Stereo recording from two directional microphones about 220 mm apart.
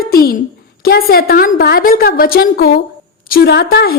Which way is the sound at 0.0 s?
40° left (ahead or behind).